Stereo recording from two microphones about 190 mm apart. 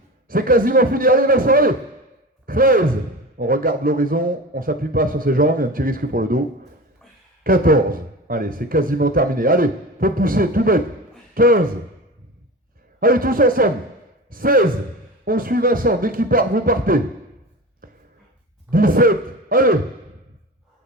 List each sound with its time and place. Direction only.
0.3 s a man's voice: 50° right (ahead or behind)
7.4 s a man's voice: 50° right (ahead or behind)
13.0 s a man's voice: 50° right (ahead or behind)
18.7 s speech: 50° right (ahead or behind)